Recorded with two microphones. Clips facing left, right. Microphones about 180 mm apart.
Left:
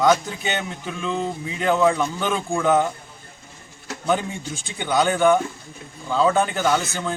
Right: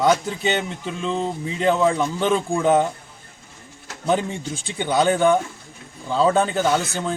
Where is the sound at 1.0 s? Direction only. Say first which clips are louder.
Right 1 dB; 30° right (ahead or behind).